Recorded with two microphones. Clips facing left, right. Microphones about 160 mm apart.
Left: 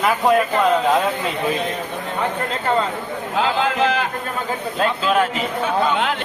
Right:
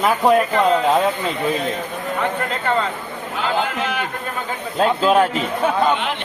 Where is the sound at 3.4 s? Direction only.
90° left.